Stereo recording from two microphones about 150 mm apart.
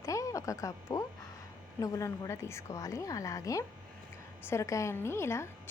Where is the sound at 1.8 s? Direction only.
20° left (ahead or behind).